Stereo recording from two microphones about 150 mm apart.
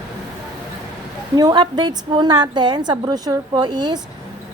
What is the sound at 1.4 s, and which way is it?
A woman's voice, 30° right (ahead or behind).